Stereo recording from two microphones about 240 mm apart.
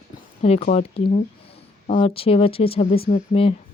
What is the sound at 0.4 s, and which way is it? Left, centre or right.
A woman's voice, left.